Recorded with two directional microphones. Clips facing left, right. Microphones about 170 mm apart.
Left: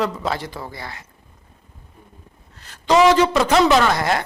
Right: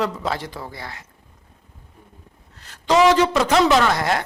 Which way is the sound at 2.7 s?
10° left (ahead or behind).